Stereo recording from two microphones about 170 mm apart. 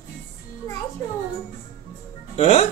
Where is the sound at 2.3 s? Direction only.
40° left (ahead or behind).